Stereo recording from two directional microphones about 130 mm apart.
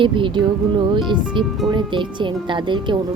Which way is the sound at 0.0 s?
40° right (ahead or behind).